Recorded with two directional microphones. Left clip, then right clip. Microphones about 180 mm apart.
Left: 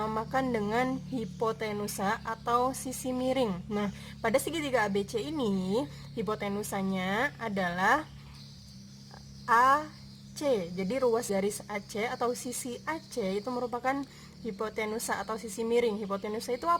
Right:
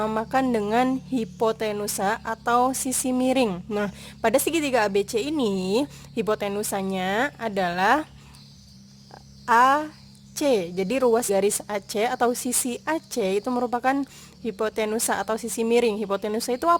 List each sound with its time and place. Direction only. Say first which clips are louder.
0.0 s speech: right 7 dB; 40° right (ahead or behind)
9.5 s speech: right 6 dB; 45° right (ahead or behind)